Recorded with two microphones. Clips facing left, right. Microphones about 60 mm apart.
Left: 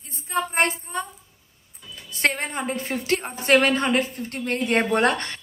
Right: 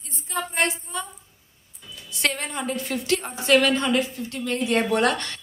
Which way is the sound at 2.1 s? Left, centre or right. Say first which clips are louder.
Left 3 dB; left.